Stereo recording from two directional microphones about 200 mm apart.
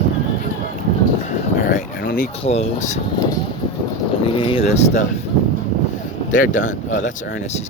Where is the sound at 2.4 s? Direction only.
30° left (ahead or behind).